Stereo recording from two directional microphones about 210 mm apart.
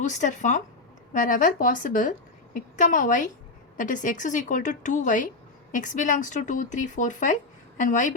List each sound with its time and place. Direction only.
0.0 s a woman's voice: 35° left (ahead or behind)